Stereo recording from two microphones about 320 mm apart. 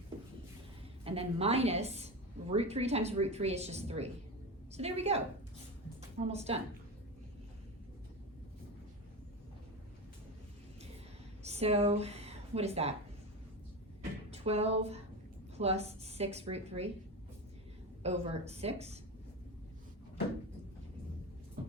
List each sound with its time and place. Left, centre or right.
1.0 s a woman's voice: centre
11.4 s speech: centre
14.3 s a woman's voice: centre
18.0 s a woman's voice: centre